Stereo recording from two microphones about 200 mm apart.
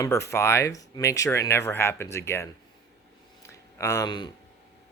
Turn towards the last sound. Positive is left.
turn(degrees=20)  # may be behind; listen again after turning